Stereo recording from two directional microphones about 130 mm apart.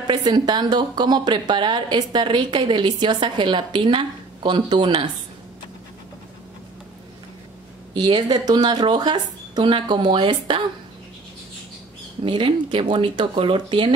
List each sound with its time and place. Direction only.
0.0 s a woman's voice: 35° right (ahead or behind)
8.0 s a woman's voice: 35° right (ahead or behind)
12.3 s a woman's voice: 40° right (ahead or behind)